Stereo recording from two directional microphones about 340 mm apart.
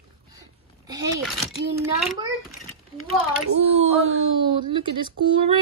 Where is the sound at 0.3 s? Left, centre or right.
Centre.